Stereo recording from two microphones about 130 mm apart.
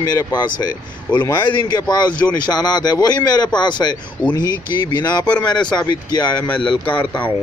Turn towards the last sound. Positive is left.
turn(degrees=10)  # may be behind; listen again after turning